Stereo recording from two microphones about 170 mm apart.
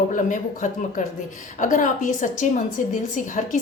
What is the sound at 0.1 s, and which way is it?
A woman's voice, 45° left (ahead or behind).